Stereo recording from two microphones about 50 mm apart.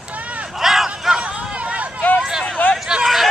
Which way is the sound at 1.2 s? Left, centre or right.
Right.